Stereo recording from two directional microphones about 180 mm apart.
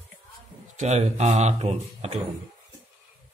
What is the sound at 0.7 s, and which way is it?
Speech, 40° right (ahead or behind).